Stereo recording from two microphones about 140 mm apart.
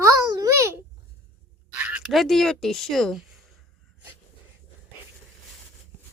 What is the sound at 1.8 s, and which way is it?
Speech, 5° right (ahead or behind).